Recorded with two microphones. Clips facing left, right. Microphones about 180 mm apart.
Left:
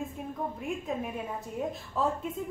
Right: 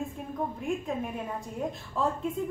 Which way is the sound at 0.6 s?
Centre (ahead or behind).